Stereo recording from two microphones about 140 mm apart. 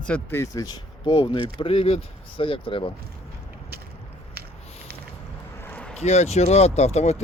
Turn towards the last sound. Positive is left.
turn(degrees=50)  # may be behind; listen again after turning